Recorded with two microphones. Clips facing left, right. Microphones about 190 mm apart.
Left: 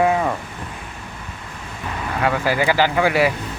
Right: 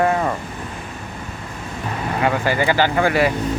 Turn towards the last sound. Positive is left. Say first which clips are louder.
# even
turn(degrees=5)  # may be behind; listen again after turning